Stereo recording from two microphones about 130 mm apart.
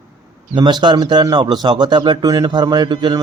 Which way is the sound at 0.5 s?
35° right (ahead or behind).